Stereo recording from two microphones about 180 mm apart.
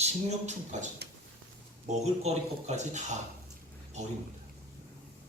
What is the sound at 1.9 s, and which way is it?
Speech, 40° right (ahead or behind).